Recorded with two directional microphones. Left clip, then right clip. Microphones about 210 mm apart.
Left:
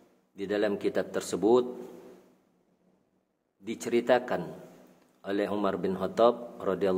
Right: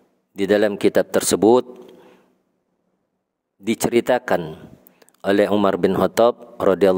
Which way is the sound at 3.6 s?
50° right (ahead or behind).